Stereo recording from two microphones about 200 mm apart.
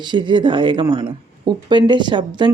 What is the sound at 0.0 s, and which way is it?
Speech, 25° right (ahead or behind).